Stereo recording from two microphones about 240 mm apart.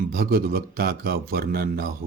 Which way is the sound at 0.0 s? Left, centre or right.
Right.